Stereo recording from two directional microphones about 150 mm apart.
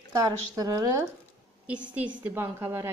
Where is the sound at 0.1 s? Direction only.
20° right (ahead or behind).